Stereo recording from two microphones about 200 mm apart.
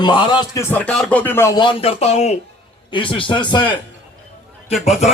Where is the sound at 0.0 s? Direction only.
20° left (ahead or behind).